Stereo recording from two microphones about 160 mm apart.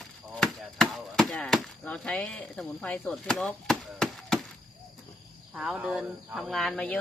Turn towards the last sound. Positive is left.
turn(degrees=5)  # may be behind; listen again after turning